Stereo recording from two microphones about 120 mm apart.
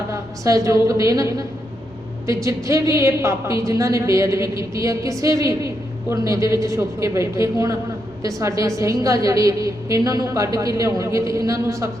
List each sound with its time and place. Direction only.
0.1 s a woman's voice: 25° right (ahead or behind)